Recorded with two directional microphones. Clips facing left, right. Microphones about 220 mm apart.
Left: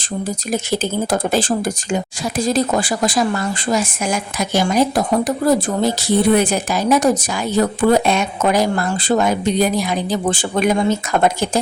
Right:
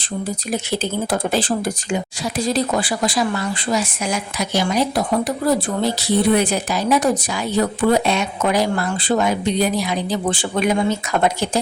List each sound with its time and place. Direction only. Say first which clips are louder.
0.5 s speech: left 3 dB; 45° left (ahead or behind)